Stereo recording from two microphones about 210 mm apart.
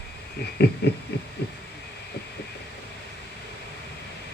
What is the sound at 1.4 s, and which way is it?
Speech, 50° left (ahead or behind).